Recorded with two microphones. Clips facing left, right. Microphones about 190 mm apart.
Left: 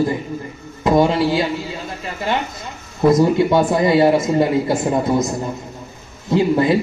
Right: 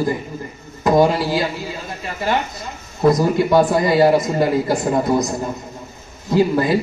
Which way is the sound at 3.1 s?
25° left (ahead or behind).